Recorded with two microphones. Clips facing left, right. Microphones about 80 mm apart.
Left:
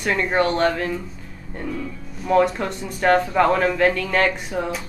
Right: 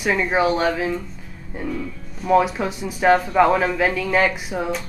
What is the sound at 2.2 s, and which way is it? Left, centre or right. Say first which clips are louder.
Speech: right 1 dB; centre.